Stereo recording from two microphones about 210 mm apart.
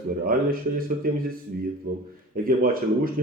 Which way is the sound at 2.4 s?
45° right (ahead or behind).